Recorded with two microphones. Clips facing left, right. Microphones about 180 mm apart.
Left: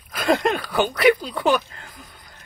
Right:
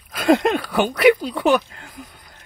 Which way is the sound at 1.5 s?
10° right (ahead or behind).